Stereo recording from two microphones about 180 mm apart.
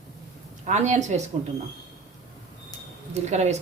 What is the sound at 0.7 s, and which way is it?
Speech, 40° right (ahead or behind).